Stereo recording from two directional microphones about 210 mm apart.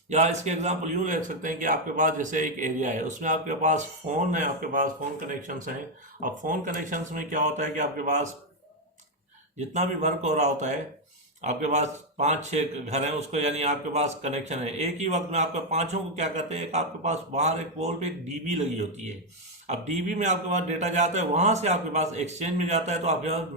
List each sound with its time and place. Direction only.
0.1 s a man's voice: 35° right (ahead or behind)
9.7 s a man's voice: 35° right (ahead or behind)
19.6 s a man's voice: 35° right (ahead or behind)